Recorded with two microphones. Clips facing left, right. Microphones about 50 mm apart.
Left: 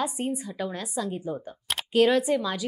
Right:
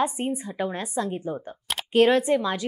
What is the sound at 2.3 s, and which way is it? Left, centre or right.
Speech, centre.